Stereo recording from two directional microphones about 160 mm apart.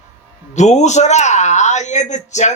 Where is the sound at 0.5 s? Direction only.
45° left (ahead or behind).